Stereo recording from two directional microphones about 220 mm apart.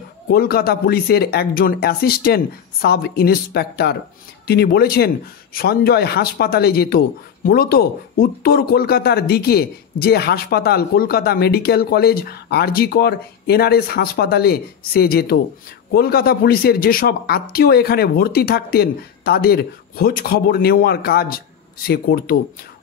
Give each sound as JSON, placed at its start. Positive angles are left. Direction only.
{"t": 0.3, "sound": "speech", "side_deg": 45}